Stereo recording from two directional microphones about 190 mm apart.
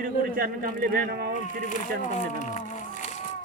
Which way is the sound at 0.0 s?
50° right (ahead or behind).